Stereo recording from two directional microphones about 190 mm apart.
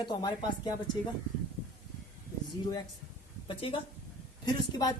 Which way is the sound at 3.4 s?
30° left (ahead or behind).